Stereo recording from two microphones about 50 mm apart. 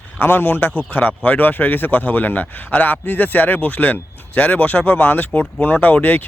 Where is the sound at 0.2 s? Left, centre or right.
Left.